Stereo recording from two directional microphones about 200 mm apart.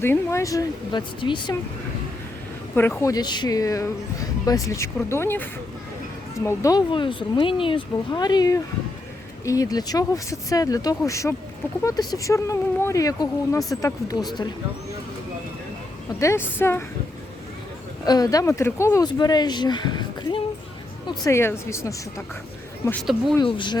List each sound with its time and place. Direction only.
0.0 s speech: 15° left (ahead or behind)
2.7 s speech: 10° left (ahead or behind)
16.2 s speech: 10° left (ahead or behind)
18.0 s speech: 20° left (ahead or behind)
22.9 s speech: centre (ahead or behind)
23.4 s speech: 25° left (ahead or behind)